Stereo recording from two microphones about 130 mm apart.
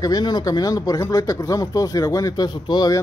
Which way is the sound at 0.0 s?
30° left (ahead or behind).